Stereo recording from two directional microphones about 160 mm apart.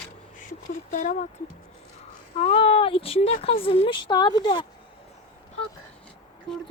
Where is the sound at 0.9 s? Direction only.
50° left (ahead or behind).